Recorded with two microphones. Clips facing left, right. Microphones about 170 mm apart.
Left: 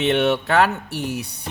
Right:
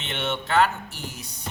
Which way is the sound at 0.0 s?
65° left (ahead or behind).